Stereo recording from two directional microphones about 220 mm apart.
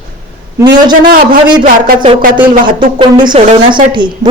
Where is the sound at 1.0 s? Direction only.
40° right (ahead or behind).